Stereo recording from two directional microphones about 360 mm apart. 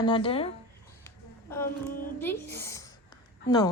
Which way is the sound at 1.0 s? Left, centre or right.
Centre.